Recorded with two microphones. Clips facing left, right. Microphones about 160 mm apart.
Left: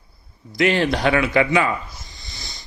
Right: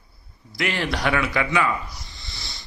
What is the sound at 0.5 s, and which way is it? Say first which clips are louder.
A man's voice: left 7 dB; 20° left (ahead or behind).